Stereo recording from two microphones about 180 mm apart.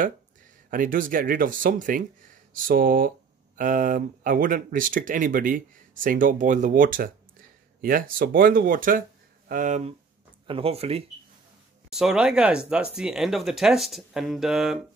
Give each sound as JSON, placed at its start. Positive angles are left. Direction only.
{"t": 0.7, "sound": "speech", "side_deg": -50}
{"t": 11.9, "sound": "speech", "side_deg": -5}